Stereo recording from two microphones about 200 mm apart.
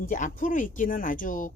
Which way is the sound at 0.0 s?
40° left (ahead or behind).